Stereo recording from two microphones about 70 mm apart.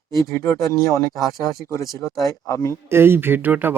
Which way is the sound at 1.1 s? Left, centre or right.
Centre.